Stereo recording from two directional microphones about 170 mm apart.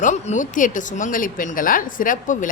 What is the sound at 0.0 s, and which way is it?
Speech, 45° left (ahead or behind).